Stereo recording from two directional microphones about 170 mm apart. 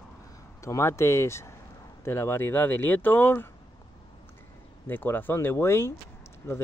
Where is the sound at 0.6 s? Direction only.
15° left (ahead or behind).